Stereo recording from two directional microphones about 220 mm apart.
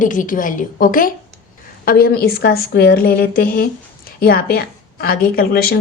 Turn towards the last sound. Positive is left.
turn(degrees=45)  # may be behind; listen again after turning